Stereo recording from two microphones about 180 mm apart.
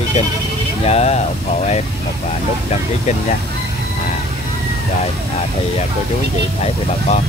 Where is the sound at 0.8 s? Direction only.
35° left (ahead or behind).